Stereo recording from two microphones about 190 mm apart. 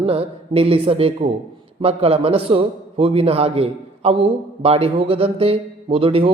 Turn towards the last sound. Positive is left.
turn(degrees=-30)  # may be behind; listen again after turning